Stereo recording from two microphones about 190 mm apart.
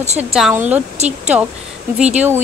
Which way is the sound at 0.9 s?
35° right (ahead or behind).